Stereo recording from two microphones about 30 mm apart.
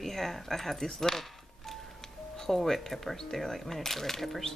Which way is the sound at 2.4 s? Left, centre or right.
Centre.